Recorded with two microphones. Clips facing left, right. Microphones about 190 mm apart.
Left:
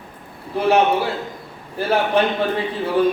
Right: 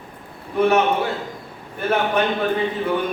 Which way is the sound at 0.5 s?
30° left (ahead or behind).